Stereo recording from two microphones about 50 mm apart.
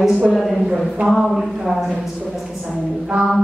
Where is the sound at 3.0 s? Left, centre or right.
Centre.